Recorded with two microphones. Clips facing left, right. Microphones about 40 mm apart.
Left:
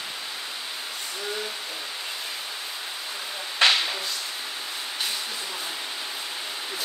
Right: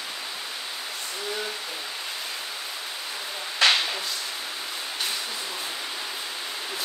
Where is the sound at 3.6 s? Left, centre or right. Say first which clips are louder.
Even; left.